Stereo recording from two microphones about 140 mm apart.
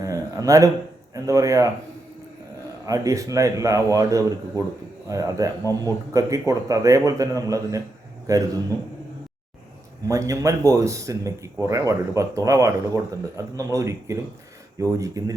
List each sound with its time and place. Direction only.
0.0 s a sound: 25° right (ahead or behind)
1.1 s speech: 25° right (ahead or behind)
2.8 s speech: 25° right (ahead or behind)
10.1 s speech: 25° right (ahead or behind)